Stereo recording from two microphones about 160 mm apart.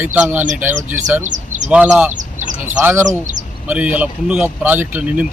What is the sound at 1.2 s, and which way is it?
Chirp, 50° right (ahead or behind).